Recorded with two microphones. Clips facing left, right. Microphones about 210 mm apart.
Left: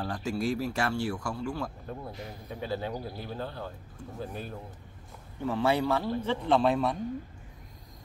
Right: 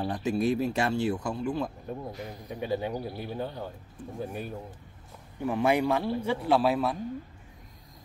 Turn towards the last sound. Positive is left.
turn(degrees=-5)  # may be behind; listen again after turning